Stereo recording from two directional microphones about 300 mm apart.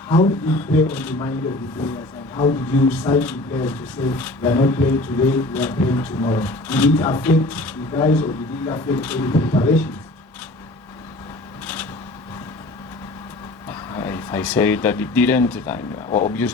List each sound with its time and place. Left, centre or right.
0.1 s speech: centre
2.3 s speech: centre
2.9 s speech: centre
11.6 s a sound: centre
13.7 s speech: centre